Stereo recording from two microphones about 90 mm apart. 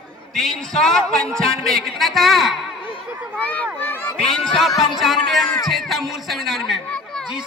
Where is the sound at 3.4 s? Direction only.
15° left (ahead or behind).